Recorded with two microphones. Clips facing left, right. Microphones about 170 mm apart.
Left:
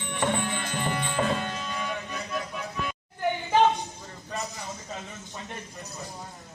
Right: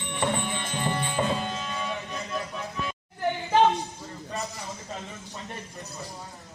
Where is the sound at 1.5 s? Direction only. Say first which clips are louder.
Right 1 dB; 25° right (ahead or behind).